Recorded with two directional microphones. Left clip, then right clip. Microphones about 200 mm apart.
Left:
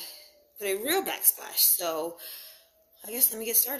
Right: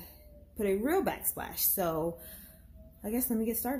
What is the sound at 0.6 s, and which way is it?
A woman's voice, 5° left (ahead or behind).